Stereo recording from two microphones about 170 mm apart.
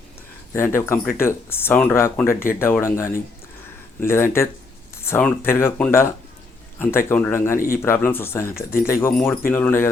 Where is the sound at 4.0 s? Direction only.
15° left (ahead or behind).